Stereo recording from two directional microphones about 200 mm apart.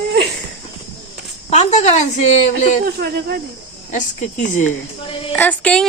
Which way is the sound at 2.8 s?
50° right (ahead or behind).